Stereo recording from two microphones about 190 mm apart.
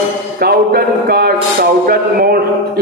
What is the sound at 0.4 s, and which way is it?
A man's voice, 55° right (ahead or behind).